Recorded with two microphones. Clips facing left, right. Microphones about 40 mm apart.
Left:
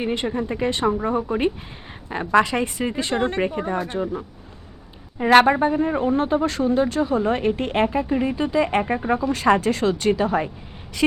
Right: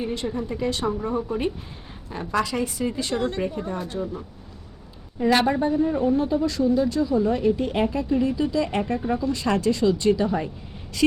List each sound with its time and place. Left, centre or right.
0.0 s speech: left
5.2 s speech: left
10.1 s speech: left